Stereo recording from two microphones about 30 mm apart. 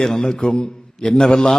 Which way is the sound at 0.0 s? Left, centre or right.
Centre.